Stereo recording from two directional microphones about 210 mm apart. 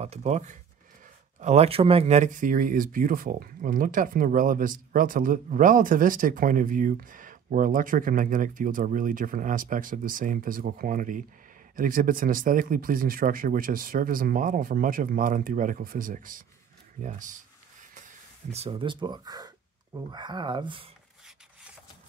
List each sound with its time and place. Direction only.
0.0 s speech: 30° right (ahead or behind)
18.5 s speech: 25° right (ahead or behind)